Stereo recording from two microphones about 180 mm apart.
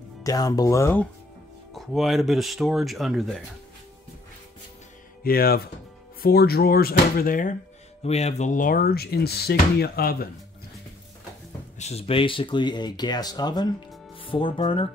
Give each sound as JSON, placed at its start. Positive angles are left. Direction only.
{"t": 0.2, "sound": "speech", "side_deg": 20}
{"t": 1.7, "sound": "speech", "side_deg": 0}
{"t": 5.2, "sound": "speech", "side_deg": 55}
{"t": 8.0, "sound": "speech", "side_deg": 35}
{"t": 11.8, "sound": "speech", "side_deg": 35}